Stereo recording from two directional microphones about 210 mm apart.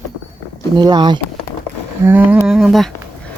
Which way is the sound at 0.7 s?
20° right (ahead or behind).